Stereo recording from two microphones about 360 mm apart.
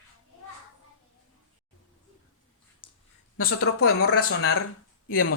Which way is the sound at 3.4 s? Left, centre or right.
Left.